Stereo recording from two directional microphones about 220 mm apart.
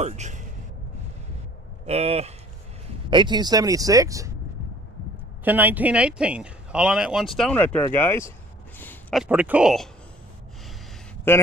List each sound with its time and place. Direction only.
0.0 s speech: 30° right (ahead or behind)
1.9 s speech: 30° right (ahead or behind)
5.4 s speech: 10° right (ahead or behind); by 8.3 s 10° left (ahead or behind)
8.7 s a sound: 10° left (ahead or behind)
9.2 s speech: 5° right (ahead or behind)
11.3 s speech: 10° left (ahead or behind)